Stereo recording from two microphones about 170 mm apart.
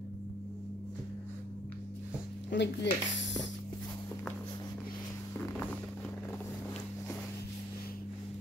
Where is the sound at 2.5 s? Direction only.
90° left.